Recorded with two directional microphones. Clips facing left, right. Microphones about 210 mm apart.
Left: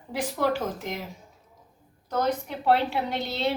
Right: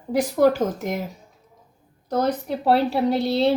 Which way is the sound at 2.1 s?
35° right (ahead or behind).